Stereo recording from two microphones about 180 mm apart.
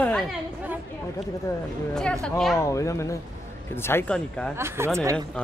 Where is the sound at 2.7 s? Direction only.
15° left (ahead or behind).